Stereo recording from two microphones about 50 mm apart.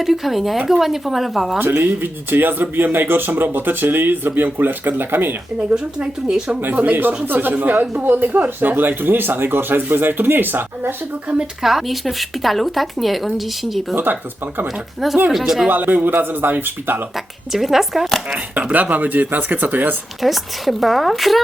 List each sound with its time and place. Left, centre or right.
0.0 s a woman's voice: centre
1.5 s speech: right
5.7 s speech: centre
6.6 s speech: right
11.6 s a woman's voice: centre
13.9 s speech: right
15.3 s a woman's voice: centre
15.7 s speech: right
17.5 s a woman's voice: centre
18.7 s speech: right
20.2 s a woman's voice: centre